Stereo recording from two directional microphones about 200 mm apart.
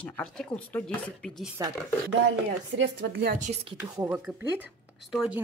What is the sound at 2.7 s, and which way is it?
Speech, 55° right (ahead or behind).